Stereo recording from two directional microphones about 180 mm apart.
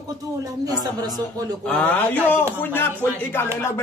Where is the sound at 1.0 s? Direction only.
20° right (ahead or behind).